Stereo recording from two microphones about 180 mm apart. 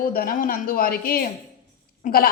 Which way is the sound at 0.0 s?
55° left (ahead or behind).